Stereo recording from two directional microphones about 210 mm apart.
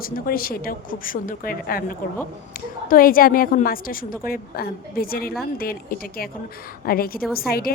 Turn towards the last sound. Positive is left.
turn(degrees=45)  # may be behind; listen again after turning